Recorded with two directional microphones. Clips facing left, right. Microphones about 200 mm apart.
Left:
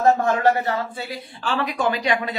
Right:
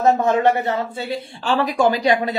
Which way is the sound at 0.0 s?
20° right (ahead or behind).